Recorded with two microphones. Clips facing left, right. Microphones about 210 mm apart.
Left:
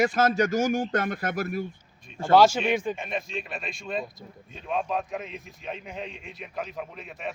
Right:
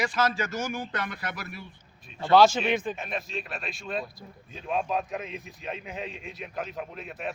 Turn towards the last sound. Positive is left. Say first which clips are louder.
# right 1 dB
turn(degrees=0)  # may be behind; listen again after turning